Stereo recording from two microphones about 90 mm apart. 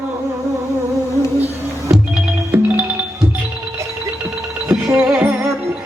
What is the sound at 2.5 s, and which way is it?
Music, 15° right (ahead or behind).